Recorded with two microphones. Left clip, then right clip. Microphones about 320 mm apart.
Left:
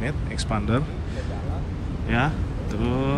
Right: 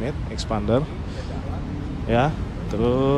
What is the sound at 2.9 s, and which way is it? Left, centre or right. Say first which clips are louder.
Speech: right 6 dB; right.